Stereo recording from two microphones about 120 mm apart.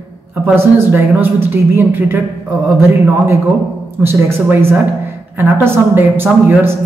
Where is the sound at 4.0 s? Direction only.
20° right (ahead or behind).